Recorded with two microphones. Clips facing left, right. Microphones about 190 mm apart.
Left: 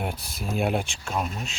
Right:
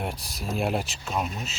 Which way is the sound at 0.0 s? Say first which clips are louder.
Left 1 dB; centre (ahead or behind).